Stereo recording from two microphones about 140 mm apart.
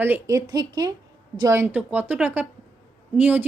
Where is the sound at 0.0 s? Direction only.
20° right (ahead or behind).